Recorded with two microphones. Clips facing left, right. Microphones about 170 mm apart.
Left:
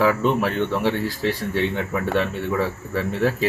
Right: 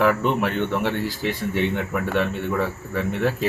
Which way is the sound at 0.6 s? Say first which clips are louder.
Left 1 dB; 15° right (ahead or behind).